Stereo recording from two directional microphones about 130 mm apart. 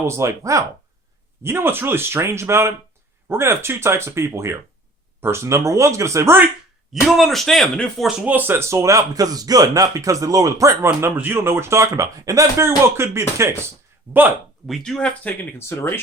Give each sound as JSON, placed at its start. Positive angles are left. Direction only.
{"t": 0.0, "sound": "speech", "side_deg": -20}
{"t": 6.9, "sound": "speech", "side_deg": 0}
{"t": 8.2, "sound": "speech", "side_deg": -15}
{"t": 14.7, "sound": "speech", "side_deg": 5}